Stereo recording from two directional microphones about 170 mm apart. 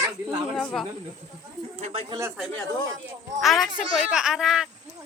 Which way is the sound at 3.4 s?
Centre (ahead or behind).